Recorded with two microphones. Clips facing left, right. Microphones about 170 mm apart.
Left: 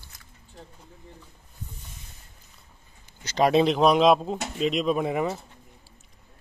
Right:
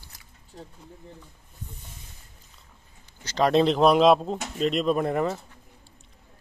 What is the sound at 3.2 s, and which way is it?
Speech, 15° left (ahead or behind).